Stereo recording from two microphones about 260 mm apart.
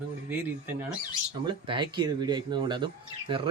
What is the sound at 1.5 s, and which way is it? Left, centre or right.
Speech, centre.